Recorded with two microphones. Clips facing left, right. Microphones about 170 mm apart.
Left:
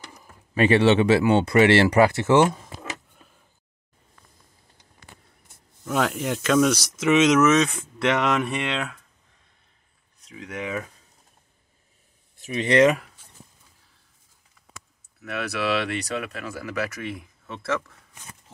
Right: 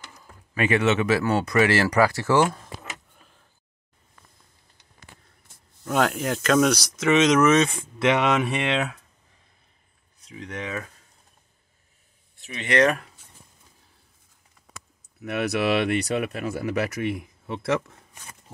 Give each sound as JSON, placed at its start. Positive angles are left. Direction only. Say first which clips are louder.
{"t": 0.6, "sound": "speech", "louder": "left 4 dB", "side_deg": 30}
{"t": 5.9, "sound": "speech", "louder": "right 1 dB", "side_deg": 0}
{"t": 10.2, "sound": "speech", "louder": "left 1 dB", "side_deg": 5}
{"t": 12.4, "sound": "speech", "louder": "left 6 dB", "side_deg": 35}
{"t": 15.3, "sound": "speech", "louder": "right 3 dB", "side_deg": -15}